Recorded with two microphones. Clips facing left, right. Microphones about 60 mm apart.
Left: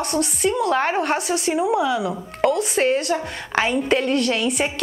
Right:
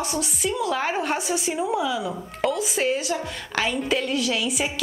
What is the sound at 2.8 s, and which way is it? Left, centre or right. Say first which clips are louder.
Speech: left 4 dB; left.